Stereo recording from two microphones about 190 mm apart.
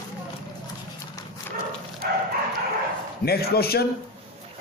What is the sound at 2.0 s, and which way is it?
Dog, 50° right (ahead or behind).